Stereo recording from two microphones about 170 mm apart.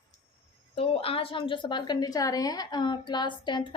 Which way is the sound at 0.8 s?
35° left (ahead or behind).